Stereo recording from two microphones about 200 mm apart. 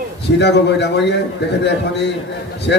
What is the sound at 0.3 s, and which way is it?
A man's voice, 60° left (ahead or behind).